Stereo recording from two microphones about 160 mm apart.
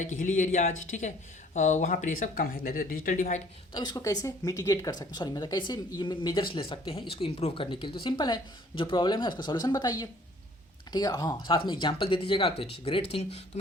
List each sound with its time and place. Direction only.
0.0 s speech: 50° left (ahead or behind)
3.8 s speech: 25° left (ahead or behind)